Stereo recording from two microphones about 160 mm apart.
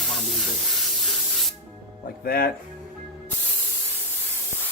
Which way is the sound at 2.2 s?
70° left (ahead or behind).